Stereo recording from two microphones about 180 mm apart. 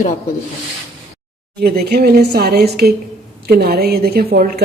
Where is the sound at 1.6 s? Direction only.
60° right (ahead or behind).